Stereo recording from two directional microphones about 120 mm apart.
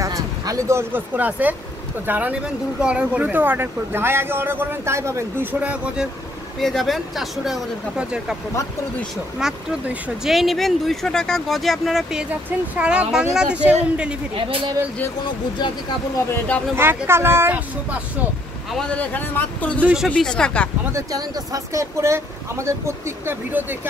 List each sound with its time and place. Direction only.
0.0 s speech: 25° right (ahead or behind); by 6.0 s 10° right (ahead or behind)
6.6 s speech: centre (ahead or behind)
9.4 s speech: 5° right (ahead or behind)
16.7 s speech: 20° right (ahead or behind)
18.8 s a man's voice: 15° left (ahead or behind)
19.8 s speech: 10° right (ahead or behind)
20.1 s a man's voice: 5° left (ahead or behind)
20.9 s speech: 30° right (ahead or behind)